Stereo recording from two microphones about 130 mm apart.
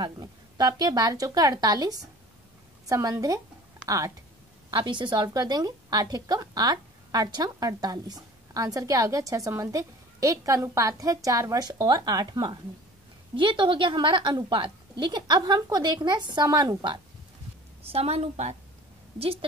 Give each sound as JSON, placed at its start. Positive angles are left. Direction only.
{"t": 0.0, "sound": "a woman's voice", "side_deg": -30}
{"t": 17.9, "sound": "a woman's voice", "side_deg": -55}
{"t": 19.1, "sound": "a woman's voice", "side_deg": -50}